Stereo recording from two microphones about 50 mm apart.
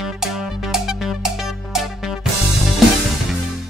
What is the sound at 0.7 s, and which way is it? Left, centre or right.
Music, centre.